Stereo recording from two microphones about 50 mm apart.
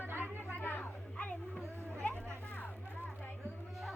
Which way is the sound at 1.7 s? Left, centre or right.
Right.